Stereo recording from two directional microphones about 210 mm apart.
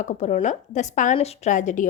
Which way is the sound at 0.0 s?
35° left (ahead or behind).